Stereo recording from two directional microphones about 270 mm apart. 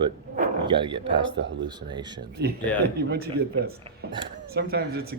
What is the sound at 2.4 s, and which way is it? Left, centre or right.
A man's voice, right.